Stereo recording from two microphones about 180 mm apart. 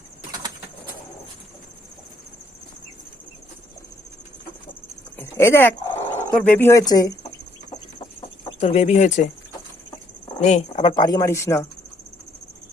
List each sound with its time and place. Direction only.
5.1 s dog: 15° left (ahead or behind)
6.3 s speech: 10° left (ahead or behind)
8.4 s speech: 35° left (ahead or behind)
10.4 s speech: 40° left (ahead or behind)
10.8 s speech: 25° left (ahead or behind)